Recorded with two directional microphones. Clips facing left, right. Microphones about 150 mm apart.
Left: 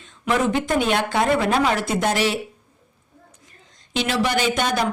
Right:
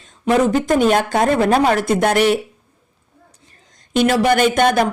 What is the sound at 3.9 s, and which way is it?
Speech, 50° right (ahead or behind).